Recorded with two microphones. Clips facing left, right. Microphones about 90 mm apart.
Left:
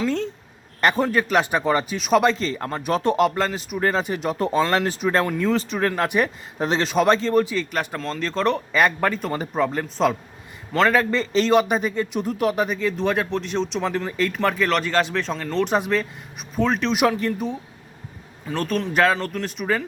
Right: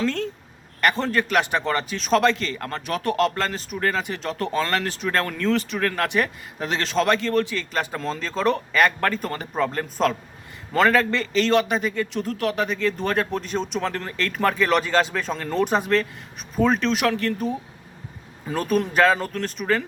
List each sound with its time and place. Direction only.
0.0 s speech: 15° left (ahead or behind)
2.3 s speech: 25° left (ahead or behind); by 3.8 s 10° left (ahead or behind)
3.8 s speech: 20° left (ahead or behind)
7.6 s speech: 5° left (ahead or behind)
8.7 s a man's voice: 15° left (ahead or behind)
10.9 s speech: 15° left (ahead or behind)
13.0 s speech: centre (ahead or behind)
15.7 s speech: 5° left (ahead or behind)
16.9 s speech: 15° left (ahead or behind)
18.4 s speech: 10° right (ahead or behind)